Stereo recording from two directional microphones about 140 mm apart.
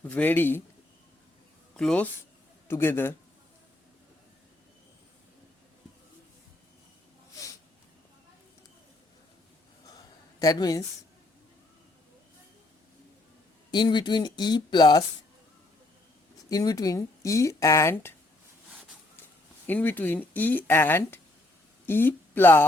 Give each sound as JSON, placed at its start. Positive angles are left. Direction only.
{"t": 0.0, "sound": "speech", "side_deg": 10}
{"t": 1.7, "sound": "speech", "side_deg": 5}
{"t": 2.6, "sound": "speech", "side_deg": 15}
{"t": 10.4, "sound": "speech", "side_deg": 25}
{"t": 13.7, "sound": "speech", "side_deg": 30}
{"t": 16.5, "sound": "speech", "side_deg": 25}
{"t": 19.6, "sound": "speech", "side_deg": 15}